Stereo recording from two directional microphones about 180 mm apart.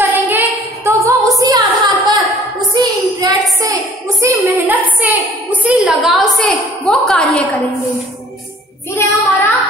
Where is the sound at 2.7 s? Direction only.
20° right (ahead or behind).